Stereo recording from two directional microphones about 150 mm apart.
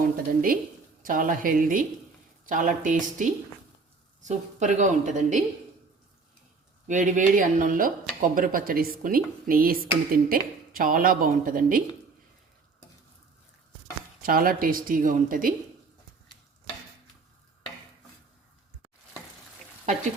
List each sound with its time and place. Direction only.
0.0 s a woman's voice: 70° right (ahead or behind)
6.8 s a woman's voice: 60° right (ahead or behind)
14.2 s speech: 75° right (ahead or behind)